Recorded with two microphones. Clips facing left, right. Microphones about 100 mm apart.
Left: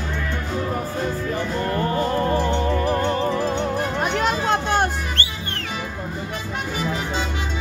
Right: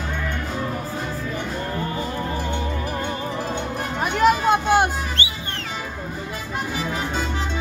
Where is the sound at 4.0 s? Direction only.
5° right (ahead or behind).